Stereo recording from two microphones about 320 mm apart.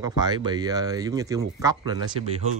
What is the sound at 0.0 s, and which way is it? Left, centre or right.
Speech, centre.